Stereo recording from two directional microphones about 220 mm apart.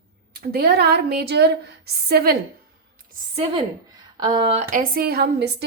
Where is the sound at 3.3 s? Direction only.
25° right (ahead or behind).